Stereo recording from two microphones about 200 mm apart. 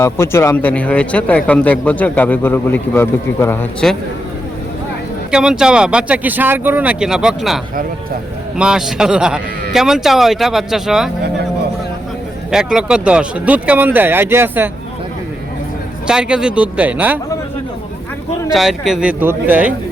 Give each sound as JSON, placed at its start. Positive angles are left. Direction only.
{"t": 0.0, "sound": "speech", "side_deg": 15}
{"t": 5.3, "sound": "speech", "side_deg": -5}
{"t": 12.5, "sound": "speech", "side_deg": -5}
{"t": 16.0, "sound": "speech", "side_deg": -5}
{"t": 18.5, "sound": "speech", "side_deg": 0}